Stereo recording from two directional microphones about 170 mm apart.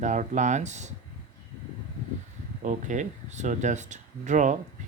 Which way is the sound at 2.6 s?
45° right (ahead or behind).